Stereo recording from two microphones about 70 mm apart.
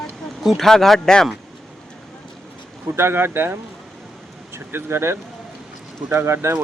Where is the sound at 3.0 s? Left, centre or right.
Right.